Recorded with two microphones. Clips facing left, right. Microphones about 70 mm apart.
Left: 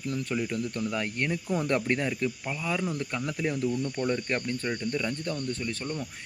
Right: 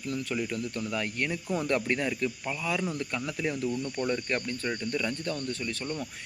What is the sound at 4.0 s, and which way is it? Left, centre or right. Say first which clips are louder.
Speech: left 1 dB; centre.